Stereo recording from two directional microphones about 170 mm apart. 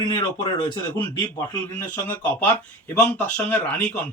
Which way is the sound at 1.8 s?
10° left (ahead or behind).